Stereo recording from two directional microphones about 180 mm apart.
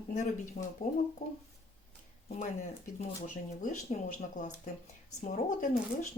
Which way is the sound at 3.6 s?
40° left (ahead or behind).